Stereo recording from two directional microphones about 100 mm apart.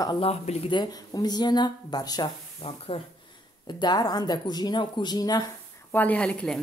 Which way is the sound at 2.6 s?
70° left (ahead or behind).